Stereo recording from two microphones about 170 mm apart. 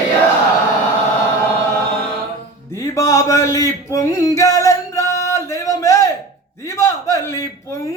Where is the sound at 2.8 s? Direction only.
20° left (ahead or behind).